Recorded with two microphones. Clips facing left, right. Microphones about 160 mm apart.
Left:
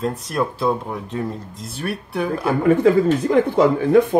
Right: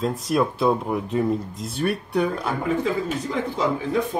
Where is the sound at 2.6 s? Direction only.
60° left (ahead or behind).